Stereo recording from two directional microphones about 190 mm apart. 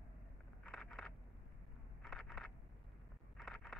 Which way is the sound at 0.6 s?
5° left (ahead or behind).